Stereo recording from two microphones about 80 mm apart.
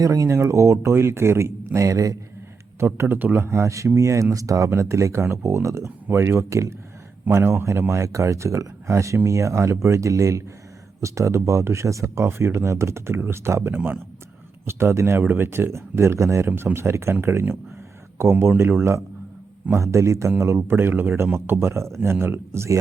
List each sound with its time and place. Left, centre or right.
0.0 s speech: right
2.8 s speech: right
13.7 s speech: centre
14.7 s speech: right
16.5 s speech: right